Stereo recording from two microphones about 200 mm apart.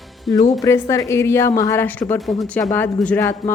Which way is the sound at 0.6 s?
15° left (ahead or behind).